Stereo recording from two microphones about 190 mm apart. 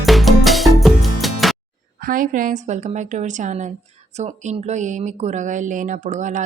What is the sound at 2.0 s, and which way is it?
Speech, 45° right (ahead or behind).